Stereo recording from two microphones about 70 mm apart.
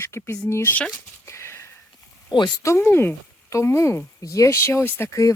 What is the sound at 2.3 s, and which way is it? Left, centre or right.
Speech, left.